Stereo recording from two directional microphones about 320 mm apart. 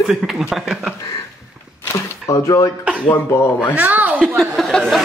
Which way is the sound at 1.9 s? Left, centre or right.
Centre.